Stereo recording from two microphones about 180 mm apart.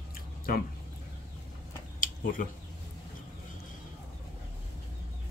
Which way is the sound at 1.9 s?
50° left (ahead or behind).